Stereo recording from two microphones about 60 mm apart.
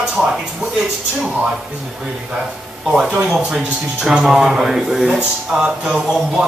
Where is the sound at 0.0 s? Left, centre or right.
Centre.